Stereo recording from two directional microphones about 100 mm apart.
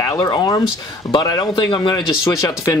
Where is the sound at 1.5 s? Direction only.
55° left (ahead or behind).